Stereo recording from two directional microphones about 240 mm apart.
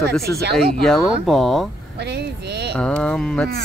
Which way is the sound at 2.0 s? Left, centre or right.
Right.